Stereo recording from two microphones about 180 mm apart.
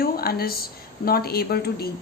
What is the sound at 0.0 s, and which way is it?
Speech, 60° left (ahead or behind).